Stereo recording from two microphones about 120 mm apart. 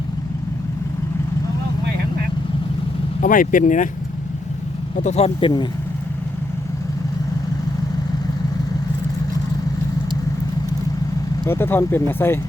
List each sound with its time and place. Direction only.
3.2 s speech: 90° left
5.0 s speech: 60° left (ahead or behind)
5.4 s speech: 40° left (ahead or behind)
11.4 s speech: 20° left (ahead or behind)